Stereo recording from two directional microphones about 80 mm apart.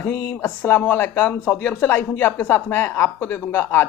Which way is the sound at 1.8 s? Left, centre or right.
Left.